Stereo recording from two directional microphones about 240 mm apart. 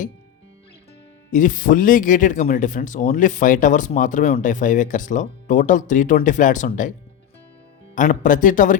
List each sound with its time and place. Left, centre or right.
1.3 s speech: left
7.9 s speech: left